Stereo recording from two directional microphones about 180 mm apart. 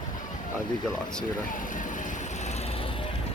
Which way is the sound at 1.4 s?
45° left (ahead or behind).